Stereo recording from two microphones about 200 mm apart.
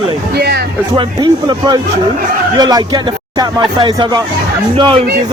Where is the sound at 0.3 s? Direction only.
55° right (ahead or behind).